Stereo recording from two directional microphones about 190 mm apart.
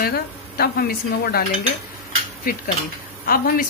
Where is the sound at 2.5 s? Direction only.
50° left (ahead or behind).